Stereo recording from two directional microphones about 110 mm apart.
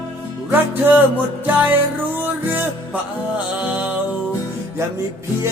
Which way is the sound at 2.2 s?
15° right (ahead or behind).